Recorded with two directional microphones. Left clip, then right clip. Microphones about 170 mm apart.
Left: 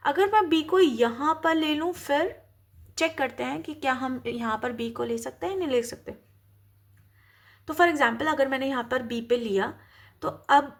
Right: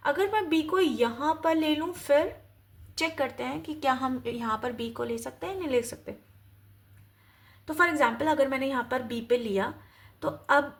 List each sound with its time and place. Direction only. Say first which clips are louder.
0.0 s a woman's voice: left 5 dB; 35° left (ahead or behind)
7.7 s a woman's voice: left 2 dB; 30° left (ahead or behind)